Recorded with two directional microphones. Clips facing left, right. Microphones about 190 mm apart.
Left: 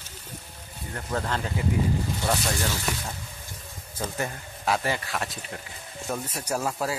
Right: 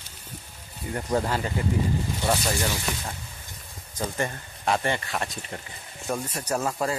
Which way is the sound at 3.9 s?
5° left (ahead or behind).